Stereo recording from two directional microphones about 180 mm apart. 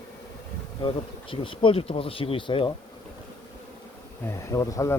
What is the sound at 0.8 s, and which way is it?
Bee, 30° left (ahead or behind).